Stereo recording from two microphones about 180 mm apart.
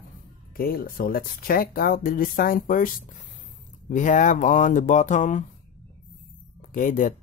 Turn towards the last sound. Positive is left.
turn(degrees=45)  # may be behind; listen again after turning